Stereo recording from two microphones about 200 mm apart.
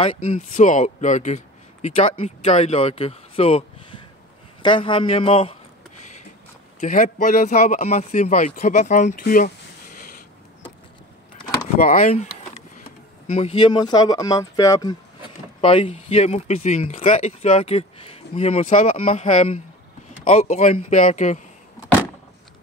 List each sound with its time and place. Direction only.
0.0 s speech: 25° left (ahead or behind)
0.4 s speech: 40° left (ahead or behind)
4.6 s speech: 25° left (ahead or behind)
6.8 s speech: 40° left (ahead or behind)
11.8 s speech: 40° left (ahead or behind)